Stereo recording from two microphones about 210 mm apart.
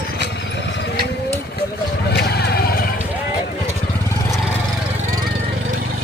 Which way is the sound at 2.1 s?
50° left (ahead or behind).